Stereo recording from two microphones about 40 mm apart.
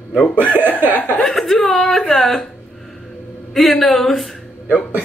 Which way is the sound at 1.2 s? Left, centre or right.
Centre.